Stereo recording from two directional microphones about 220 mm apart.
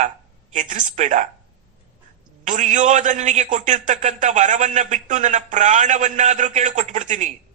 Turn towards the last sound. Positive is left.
turn(degrees=-35)  # may be behind; listen again after turning